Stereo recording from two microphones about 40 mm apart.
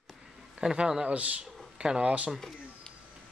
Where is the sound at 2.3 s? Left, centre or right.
Centre.